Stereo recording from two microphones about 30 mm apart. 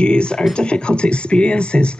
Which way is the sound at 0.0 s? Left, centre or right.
Left.